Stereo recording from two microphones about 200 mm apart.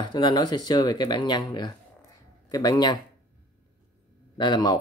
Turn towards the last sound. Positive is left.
turn(degrees=20)  # may be behind; listen again after turning